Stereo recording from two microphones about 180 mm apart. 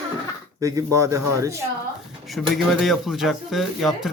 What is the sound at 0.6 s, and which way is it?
Speech, 20° right (ahead or behind).